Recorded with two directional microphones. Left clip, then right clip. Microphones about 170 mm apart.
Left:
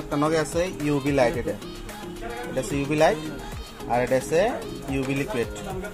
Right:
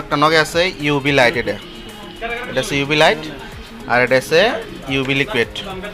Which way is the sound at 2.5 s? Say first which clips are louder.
Right 9 dB; 15° right (ahead or behind).